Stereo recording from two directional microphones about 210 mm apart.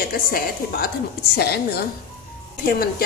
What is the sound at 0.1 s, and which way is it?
A woman's voice, 45° left (ahead or behind).